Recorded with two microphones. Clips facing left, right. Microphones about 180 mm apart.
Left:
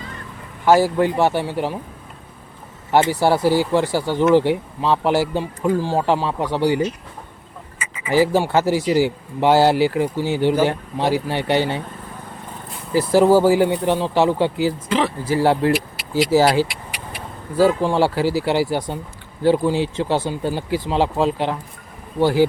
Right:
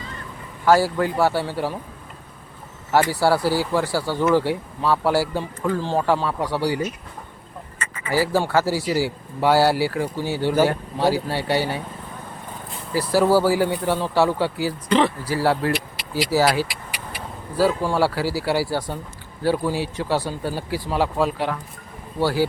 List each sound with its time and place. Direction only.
0.6 s speech: 20° left (ahead or behind)
2.9 s speech: 20° left (ahead or behind)
7.8 s duck: 10° left (ahead or behind)
8.1 s speech: 20° left (ahead or behind)
12.9 s speech: 20° left (ahead or behind)
14.8 s speech: centre (ahead or behind)
15.2 s speech: 20° left (ahead or behind)